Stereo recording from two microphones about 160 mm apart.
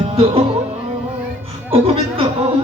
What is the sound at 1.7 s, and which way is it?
Speech, 35° right (ahead or behind).